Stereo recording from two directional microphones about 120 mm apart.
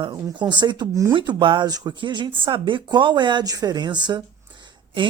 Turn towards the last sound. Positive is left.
turn(degrees=-40)  # may be behind; listen again after turning